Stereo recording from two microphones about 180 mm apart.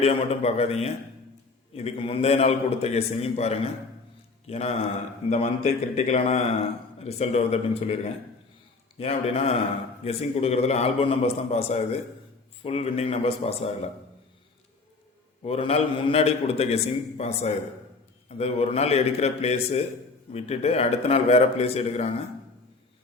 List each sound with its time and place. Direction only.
0.0 s a man's voice: 35° left (ahead or behind)
15.4 s a man's voice: 35° left (ahead or behind)